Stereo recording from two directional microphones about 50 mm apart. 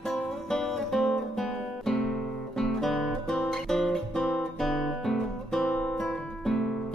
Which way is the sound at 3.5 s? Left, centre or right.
Centre.